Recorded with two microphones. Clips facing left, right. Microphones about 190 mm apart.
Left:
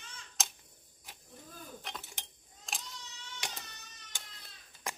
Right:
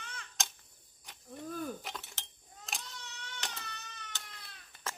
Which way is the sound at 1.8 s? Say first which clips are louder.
Right 1 dB; 5° right (ahead or behind).